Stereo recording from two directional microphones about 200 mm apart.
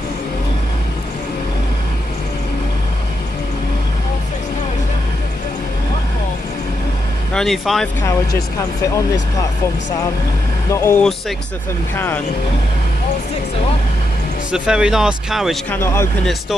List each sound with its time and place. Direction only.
7.3 s speech: centre (ahead or behind)
8.0 s speech: 15° left (ahead or behind)
10.7 s speech: 15° left (ahead or behind)
14.5 s speech: 5° right (ahead or behind)
15.7 s speech: 10° left (ahead or behind)